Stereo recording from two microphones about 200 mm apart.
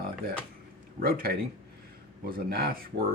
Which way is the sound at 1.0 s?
45° right (ahead or behind).